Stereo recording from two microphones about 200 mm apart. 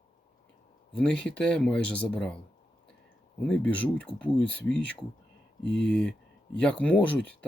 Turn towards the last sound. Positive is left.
turn(degrees=5)  # may be behind; listen again after turning